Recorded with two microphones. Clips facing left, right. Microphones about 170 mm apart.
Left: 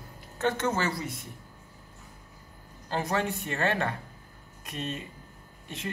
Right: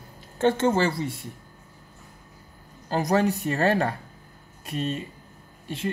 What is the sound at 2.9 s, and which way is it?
Speech, 40° right (ahead or behind).